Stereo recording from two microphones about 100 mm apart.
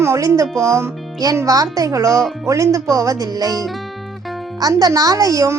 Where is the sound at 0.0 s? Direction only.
30° right (ahead or behind).